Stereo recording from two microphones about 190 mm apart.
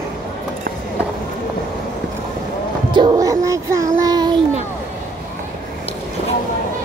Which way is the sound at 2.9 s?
20° right (ahead or behind).